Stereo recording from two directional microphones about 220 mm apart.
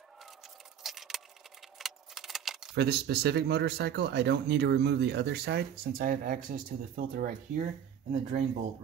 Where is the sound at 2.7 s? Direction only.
50° right (ahead or behind).